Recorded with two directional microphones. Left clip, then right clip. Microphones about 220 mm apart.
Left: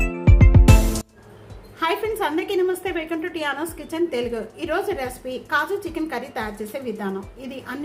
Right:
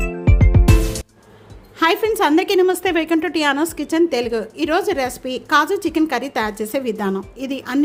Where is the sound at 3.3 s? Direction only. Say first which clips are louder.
Right 8 dB; 45° right (ahead or behind).